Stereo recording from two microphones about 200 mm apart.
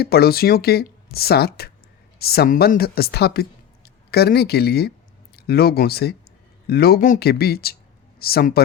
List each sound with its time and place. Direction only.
0.0 s speech: 50° left (ahead or behind)